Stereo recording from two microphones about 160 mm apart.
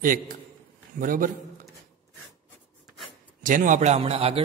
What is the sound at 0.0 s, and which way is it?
A man's voice, 60° right (ahead or behind).